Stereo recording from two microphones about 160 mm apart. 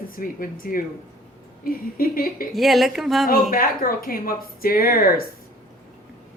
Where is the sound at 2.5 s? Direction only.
Centre (ahead or behind).